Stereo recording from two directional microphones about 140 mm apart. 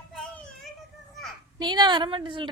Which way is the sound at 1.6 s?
30° right (ahead or behind).